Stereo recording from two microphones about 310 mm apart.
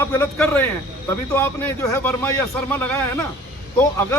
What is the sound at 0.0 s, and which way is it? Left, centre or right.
Speech, centre.